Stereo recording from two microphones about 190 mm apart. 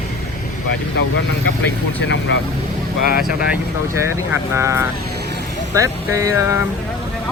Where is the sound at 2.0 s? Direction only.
75° left (ahead or behind).